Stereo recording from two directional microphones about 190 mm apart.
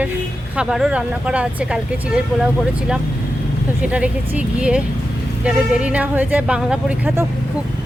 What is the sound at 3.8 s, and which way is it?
Speech, 5° right (ahead or behind).